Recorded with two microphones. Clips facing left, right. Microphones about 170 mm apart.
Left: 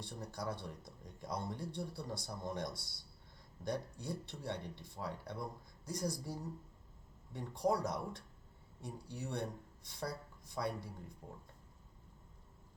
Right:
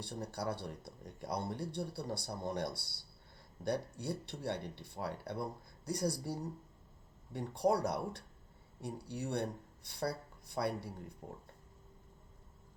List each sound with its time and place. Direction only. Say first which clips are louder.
0.0 s speech: right 4 dB; 70° right (ahead or behind)